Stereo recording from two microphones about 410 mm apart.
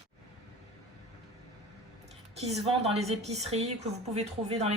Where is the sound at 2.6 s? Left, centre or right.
Centre.